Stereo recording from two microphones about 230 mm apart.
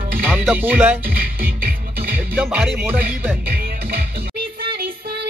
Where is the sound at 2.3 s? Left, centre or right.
Centre.